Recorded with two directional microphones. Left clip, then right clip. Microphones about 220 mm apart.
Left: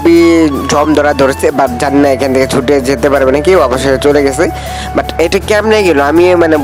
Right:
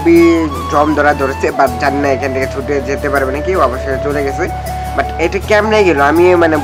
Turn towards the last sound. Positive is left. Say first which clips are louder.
# left 2 dB
turn(degrees=40)  # may be behind; listen again after turning